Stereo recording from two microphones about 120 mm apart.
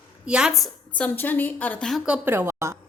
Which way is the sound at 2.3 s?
20° right (ahead or behind).